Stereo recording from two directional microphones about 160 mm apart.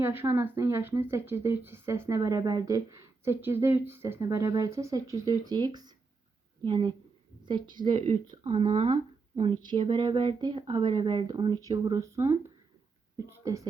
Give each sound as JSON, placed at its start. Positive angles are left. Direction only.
{"t": 0.0, "sound": "speech", "side_deg": -15}